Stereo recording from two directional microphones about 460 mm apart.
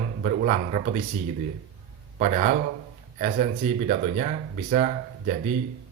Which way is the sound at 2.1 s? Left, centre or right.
Centre.